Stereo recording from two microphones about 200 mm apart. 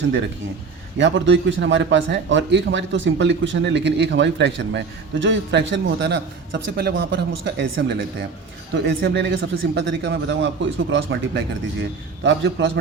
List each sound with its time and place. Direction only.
0.9 s a man's voice: 65° right (ahead or behind)